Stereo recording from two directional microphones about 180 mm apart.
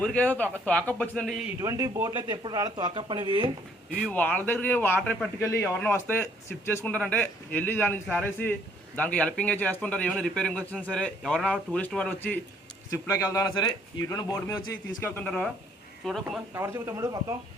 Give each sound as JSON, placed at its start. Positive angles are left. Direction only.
{"t": 0.0, "sound": "a man's voice", "side_deg": 10}
{"t": 1.5, "sound": "speech", "side_deg": -15}
{"t": 4.1, "sound": "a man's voice", "side_deg": 10}
{"t": 16.6, "sound": "speech", "side_deg": -15}